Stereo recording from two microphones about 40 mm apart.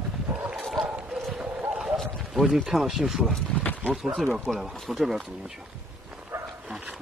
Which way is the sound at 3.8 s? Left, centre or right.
Right.